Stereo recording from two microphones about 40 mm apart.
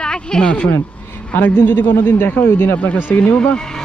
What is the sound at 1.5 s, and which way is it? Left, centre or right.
A man's voice, left.